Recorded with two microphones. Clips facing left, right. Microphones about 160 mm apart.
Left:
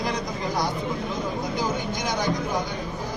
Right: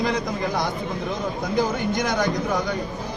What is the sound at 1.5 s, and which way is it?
Speech, 55° right (ahead or behind).